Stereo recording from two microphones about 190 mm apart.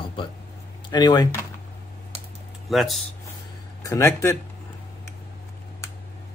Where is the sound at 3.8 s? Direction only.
15° left (ahead or behind).